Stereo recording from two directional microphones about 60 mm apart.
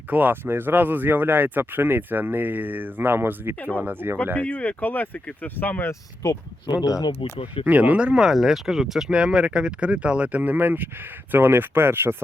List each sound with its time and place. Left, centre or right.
0.1 s speech: right
4.4 s speech: left
6.8 s speech: left
7.6 s speech: right
8.2 s speech: centre; by 12.1 s right